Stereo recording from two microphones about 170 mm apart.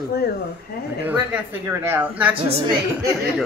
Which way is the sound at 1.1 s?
10° right (ahead or behind).